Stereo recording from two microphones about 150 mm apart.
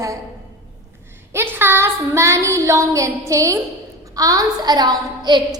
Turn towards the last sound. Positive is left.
turn(degrees=-30)  # may be behind; listen again after turning